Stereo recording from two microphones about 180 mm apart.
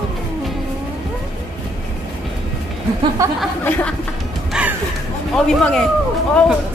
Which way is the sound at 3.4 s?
5° left (ahead or behind).